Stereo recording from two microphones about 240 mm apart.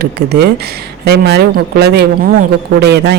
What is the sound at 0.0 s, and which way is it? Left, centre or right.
Speech, right.